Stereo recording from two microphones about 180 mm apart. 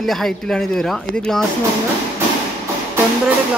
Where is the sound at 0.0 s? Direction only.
Centre (ahead or behind).